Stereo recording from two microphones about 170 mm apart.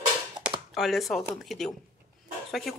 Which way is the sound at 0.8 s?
Centre (ahead or behind).